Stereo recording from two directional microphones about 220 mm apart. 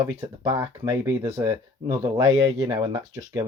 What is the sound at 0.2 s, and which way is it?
Speech, 15° right (ahead or behind).